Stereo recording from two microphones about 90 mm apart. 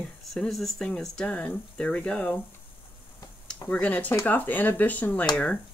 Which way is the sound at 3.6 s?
10° left (ahead or behind).